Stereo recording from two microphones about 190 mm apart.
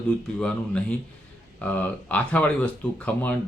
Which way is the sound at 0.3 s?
5° left (ahead or behind).